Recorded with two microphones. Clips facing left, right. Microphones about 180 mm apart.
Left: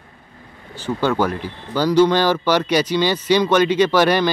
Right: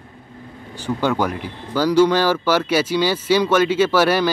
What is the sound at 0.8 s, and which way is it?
Speech, 15° right (ahead or behind).